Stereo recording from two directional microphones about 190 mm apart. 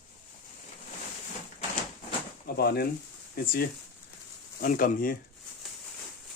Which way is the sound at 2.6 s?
55° left (ahead or behind).